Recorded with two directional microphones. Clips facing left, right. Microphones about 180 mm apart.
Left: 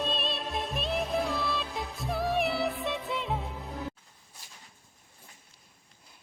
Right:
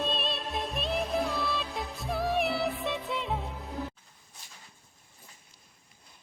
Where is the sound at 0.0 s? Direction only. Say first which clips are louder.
Even; centre (ahead or behind).